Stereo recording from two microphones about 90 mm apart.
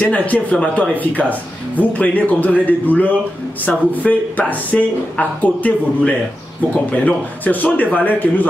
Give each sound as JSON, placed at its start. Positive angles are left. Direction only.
{"t": 0.1, "sound": "a man's voice", "side_deg": 15}